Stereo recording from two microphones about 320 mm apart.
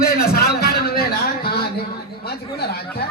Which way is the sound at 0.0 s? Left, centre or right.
Left.